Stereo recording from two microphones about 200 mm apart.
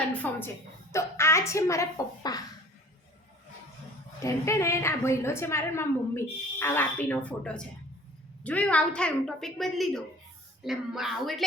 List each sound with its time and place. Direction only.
0.1 s a woman's voice: 10° left (ahead or behind)
4.2 s a woman's voice: 15° left (ahead or behind)